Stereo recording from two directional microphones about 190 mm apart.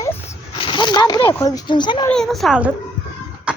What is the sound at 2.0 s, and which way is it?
Speech, centre (ahead or behind).